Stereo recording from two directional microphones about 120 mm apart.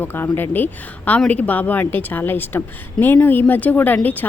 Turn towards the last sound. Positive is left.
turn(degrees=15)  # may be behind; listen again after turning